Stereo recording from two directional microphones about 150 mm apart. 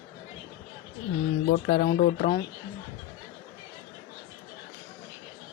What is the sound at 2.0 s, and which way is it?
Speech, 75° left (ahead or behind).